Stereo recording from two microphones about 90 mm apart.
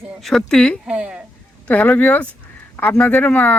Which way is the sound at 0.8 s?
10° right (ahead or behind).